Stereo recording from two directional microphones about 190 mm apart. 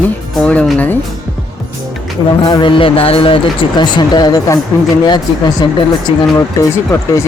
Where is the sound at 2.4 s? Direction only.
25° left (ahead or behind).